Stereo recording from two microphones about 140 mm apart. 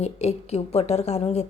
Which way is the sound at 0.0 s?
50° left (ahead or behind).